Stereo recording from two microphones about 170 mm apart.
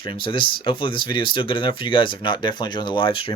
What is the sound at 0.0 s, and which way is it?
Speech, 30° left (ahead or behind).